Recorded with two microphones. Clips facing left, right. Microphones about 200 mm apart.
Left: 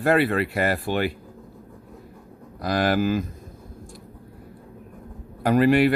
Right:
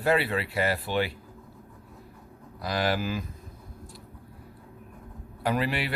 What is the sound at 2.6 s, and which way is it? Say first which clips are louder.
Speech: left 6 dB; 50° left (ahead or behind).